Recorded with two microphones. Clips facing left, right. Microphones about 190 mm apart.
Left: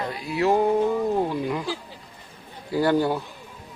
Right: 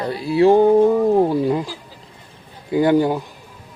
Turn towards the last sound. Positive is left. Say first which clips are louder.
# right 5 dB
turn(degrees=-15)  # may be behind; listen again after turning